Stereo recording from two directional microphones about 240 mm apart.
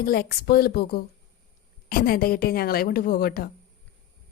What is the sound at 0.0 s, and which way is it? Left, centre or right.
A woman's voice, left.